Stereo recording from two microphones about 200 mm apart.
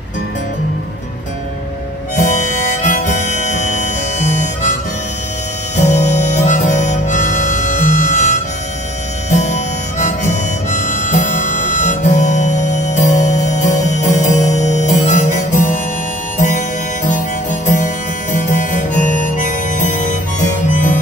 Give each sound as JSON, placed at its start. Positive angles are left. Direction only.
{"t": 2.8, "sound": "harmonica", "side_deg": 35}
{"t": 5.8, "sound": "harmonica", "side_deg": 35}
{"t": 16.3, "sound": "music", "side_deg": 35}